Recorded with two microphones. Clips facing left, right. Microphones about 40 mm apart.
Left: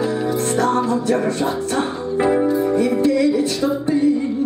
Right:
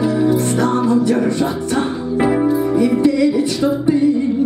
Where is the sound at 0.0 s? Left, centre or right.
Centre.